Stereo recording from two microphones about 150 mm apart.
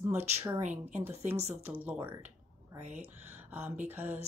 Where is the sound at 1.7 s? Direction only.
10° right (ahead or behind).